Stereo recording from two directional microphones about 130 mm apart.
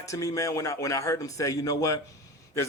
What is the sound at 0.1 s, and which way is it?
Speech, 25° left (ahead or behind).